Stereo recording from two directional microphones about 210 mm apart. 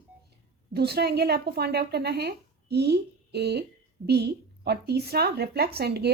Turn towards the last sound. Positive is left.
turn(degrees=-50)  # may be behind; listen again after turning